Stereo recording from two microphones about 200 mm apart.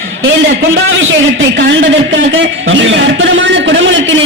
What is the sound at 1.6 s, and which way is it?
Speech, 65° right (ahead or behind).